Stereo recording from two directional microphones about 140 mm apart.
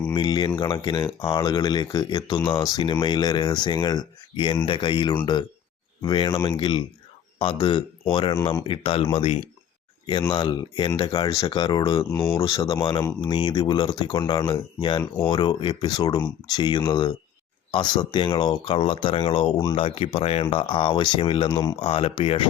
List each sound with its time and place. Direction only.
0.2 s speech: 35° left (ahead or behind)
12.1 s speech: 15° left (ahead or behind)
13.3 s speech: 35° left (ahead or behind)